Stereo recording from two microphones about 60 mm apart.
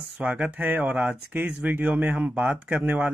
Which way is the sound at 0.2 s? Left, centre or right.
Right.